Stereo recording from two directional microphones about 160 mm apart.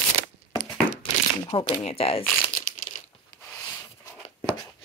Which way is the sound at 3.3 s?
20° left (ahead or behind).